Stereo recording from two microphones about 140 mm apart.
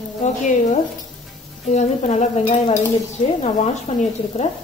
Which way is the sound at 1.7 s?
60° left (ahead or behind).